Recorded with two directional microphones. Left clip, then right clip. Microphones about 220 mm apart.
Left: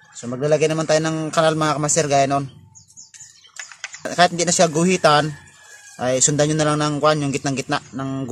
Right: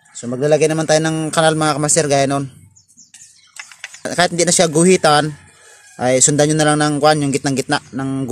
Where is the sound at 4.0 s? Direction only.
25° right (ahead or behind).